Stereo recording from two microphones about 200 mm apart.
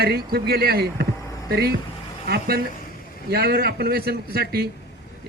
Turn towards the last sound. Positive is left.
turn(degrees=-50)  # may be behind; listen again after turning